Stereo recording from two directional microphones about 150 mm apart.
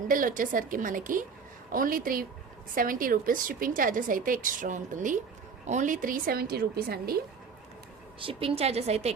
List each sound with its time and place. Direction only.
0.1 s a woman's voice: 65° right (ahead or behind); by 7.2 s 90° right
8.2 s a woman's voice: 40° right (ahead or behind)